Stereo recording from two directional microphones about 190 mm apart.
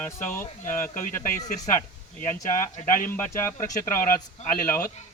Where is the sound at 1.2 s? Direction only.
40° left (ahead or behind).